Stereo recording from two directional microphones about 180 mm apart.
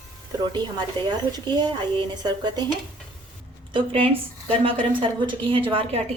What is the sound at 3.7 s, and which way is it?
A woman's voice, 30° right (ahead or behind).